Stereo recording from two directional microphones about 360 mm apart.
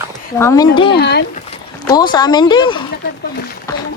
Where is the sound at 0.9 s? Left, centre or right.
Left.